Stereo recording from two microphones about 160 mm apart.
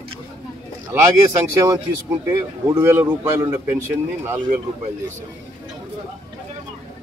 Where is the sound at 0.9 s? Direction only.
20° right (ahead or behind).